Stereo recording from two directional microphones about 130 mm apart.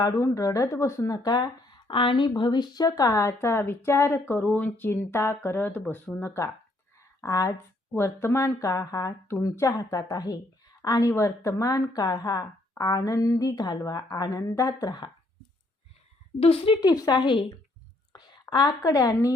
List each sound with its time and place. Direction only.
0.0 s speech: 25° left (ahead or behind)
16.4 s a woman's voice: 45° left (ahead or behind)
16.9 s a woman's voice: 30° left (ahead or behind)